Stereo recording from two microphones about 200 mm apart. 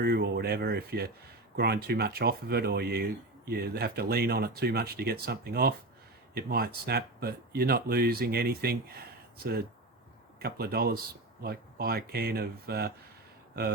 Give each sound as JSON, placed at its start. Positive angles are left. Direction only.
{"t": 0.0, "sound": "speech", "side_deg": -55}